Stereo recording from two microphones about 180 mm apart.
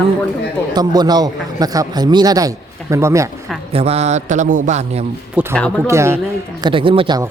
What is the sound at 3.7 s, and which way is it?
A man's voice, 35° right (ahead or behind).